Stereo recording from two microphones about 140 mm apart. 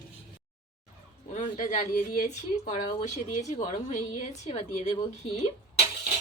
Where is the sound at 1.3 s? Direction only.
60° left (ahead or behind).